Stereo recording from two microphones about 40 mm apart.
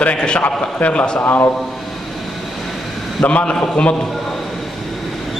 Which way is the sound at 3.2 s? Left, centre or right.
Left.